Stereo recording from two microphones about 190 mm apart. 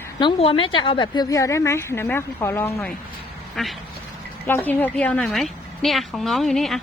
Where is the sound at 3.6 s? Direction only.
Centre (ahead or behind).